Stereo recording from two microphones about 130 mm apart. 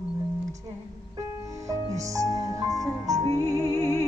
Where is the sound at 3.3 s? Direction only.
20° left (ahead or behind).